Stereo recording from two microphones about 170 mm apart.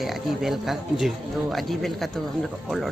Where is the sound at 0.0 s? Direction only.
Centre (ahead or behind).